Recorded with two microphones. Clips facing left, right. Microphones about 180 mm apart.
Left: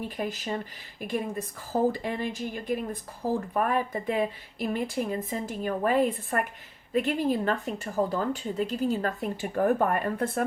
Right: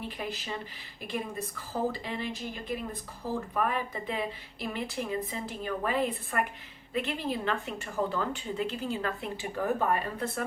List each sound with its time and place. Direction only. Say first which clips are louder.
0.0 s speech: left 5 dB; 45° left (ahead or behind)